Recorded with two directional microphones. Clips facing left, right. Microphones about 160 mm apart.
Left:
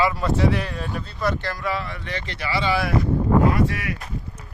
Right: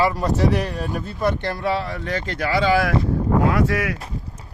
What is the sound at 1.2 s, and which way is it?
Speech, 20° right (ahead or behind).